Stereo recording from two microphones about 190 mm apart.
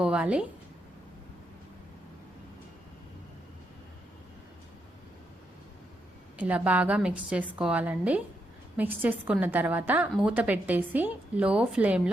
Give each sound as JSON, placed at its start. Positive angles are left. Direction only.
{"t": 0.0, "sound": "a woman's voice", "side_deg": -5}
{"t": 6.3, "sound": "a woman's voice", "side_deg": -10}